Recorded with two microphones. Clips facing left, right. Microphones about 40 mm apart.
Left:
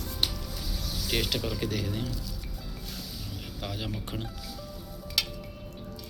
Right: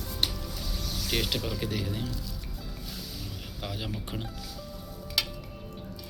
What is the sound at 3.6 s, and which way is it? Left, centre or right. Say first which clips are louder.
Speech: even; centre.